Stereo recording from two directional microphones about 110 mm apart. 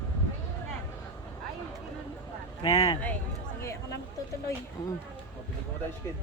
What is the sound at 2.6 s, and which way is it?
Speech, 60° left (ahead or behind).